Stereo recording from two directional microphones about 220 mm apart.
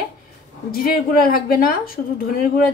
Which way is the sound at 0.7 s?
40° left (ahead or behind).